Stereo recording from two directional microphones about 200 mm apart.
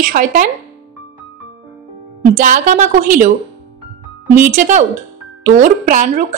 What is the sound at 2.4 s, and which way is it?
Speech, 40° right (ahead or behind).